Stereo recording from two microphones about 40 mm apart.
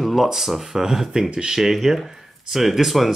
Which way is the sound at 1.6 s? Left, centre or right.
Centre.